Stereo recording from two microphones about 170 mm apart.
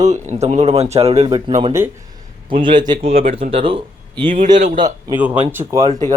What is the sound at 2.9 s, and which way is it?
A man's voice, 40° right (ahead or behind).